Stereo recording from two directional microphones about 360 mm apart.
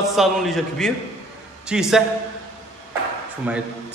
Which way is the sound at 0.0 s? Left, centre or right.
Centre.